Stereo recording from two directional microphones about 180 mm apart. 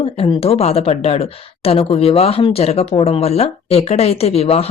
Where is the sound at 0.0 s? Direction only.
30° left (ahead or behind).